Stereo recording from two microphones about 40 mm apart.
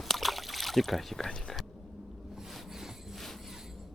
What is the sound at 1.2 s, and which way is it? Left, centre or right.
Speech, centre.